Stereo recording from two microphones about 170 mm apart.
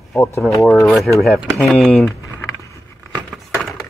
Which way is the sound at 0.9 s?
Centre (ahead or behind).